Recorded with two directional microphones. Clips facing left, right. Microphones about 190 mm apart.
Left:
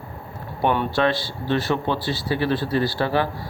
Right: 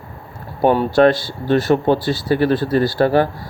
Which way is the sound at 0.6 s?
40° right (ahead or behind).